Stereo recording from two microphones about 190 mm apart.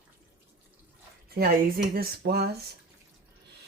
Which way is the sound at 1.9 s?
55° right (ahead or behind).